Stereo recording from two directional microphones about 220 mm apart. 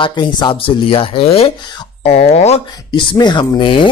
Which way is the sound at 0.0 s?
20° left (ahead or behind).